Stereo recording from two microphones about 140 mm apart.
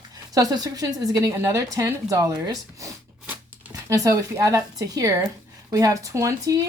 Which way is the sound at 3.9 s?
25° right (ahead or behind).